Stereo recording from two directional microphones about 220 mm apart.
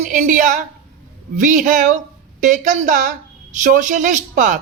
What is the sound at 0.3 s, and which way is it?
A woman's voice, 35° right (ahead or behind).